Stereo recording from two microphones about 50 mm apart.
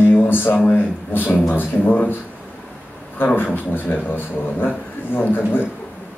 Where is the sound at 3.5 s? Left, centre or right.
Left.